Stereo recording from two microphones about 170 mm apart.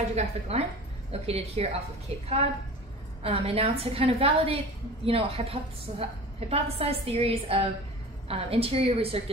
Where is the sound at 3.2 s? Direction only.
35° right (ahead or behind).